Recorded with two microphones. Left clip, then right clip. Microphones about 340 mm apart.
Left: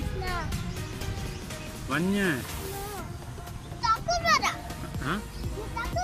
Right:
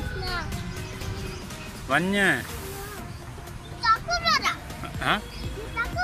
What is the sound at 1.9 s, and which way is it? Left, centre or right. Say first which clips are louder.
Speech: right 6 dB; centre.